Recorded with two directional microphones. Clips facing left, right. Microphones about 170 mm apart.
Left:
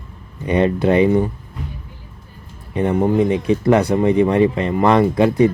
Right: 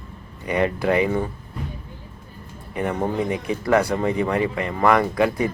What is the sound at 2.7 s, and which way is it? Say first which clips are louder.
Speech: left 7 dB; 25° left (ahead or behind).